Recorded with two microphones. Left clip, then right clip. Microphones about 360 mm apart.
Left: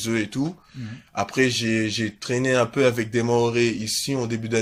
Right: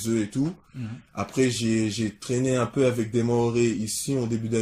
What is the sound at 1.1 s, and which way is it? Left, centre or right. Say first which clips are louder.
Speech: left 4 dB; left.